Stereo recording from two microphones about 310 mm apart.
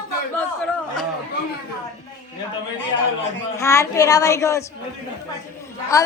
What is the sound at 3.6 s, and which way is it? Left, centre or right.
A child's voice, centre.